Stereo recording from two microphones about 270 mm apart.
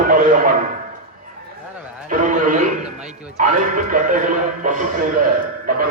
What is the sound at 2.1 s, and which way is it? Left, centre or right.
A man's voice, right.